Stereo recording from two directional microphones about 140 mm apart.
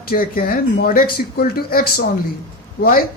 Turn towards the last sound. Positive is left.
turn(degrees=90)